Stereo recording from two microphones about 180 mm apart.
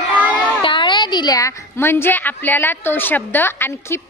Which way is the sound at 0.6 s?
25° left (ahead or behind).